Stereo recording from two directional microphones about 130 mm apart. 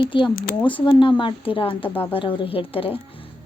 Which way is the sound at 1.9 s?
15° left (ahead or behind).